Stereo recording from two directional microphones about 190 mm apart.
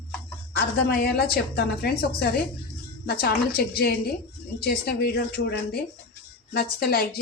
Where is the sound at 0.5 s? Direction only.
55° left (ahead or behind).